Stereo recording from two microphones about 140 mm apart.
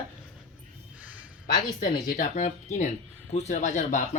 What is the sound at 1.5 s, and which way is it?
Speech, 30° left (ahead or behind).